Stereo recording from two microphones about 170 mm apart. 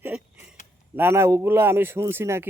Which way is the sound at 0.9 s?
15° right (ahead or behind).